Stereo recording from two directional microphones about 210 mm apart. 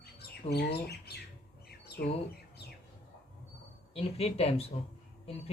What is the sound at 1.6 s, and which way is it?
Bird, 50° left (ahead or behind).